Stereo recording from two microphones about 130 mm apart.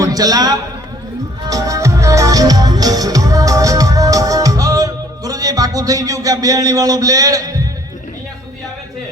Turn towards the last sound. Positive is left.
turn(degrees=-25)  # may be behind; listen again after turning